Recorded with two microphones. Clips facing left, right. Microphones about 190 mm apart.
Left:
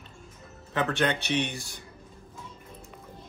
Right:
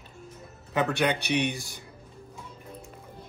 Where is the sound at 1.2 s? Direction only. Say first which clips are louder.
Right 2 dB; 15° right (ahead or behind).